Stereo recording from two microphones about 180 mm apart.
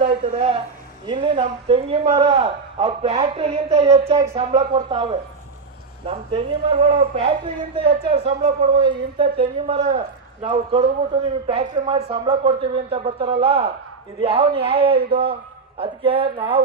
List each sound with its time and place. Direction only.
0.0 s a woman's voice: 35° right (ahead or behind)
15.8 s speech: 30° right (ahead or behind)